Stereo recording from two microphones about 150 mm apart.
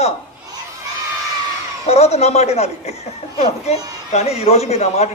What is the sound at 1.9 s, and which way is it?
A man's voice, 45° left (ahead or behind).